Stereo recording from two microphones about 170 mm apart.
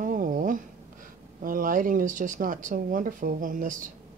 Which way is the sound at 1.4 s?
55° right (ahead or behind).